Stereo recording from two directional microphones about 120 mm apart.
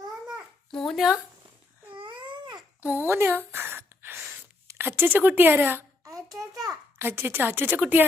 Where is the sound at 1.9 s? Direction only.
45° right (ahead or behind).